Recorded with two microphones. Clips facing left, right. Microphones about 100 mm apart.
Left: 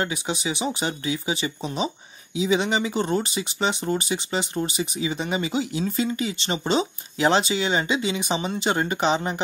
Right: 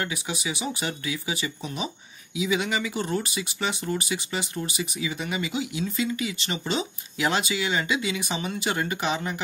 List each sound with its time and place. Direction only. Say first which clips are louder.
0.0 s speech: left 4 dB; 25° left (ahead or behind)